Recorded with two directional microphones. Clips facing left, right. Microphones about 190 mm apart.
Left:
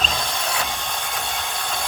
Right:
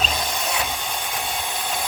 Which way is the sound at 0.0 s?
5° right (ahead or behind).